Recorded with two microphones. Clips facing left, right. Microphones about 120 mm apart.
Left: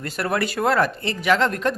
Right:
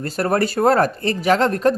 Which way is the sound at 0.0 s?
40° right (ahead or behind).